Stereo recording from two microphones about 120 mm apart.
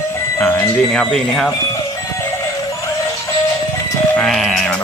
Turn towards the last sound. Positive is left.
turn(degrees=0)  # may be behind; listen again after turning